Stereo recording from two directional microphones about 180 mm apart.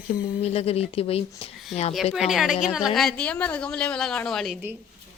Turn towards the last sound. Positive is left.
turn(degrees=0)  # may be behind; listen again after turning